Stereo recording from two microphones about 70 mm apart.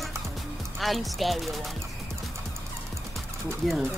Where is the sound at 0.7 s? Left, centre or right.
Centre.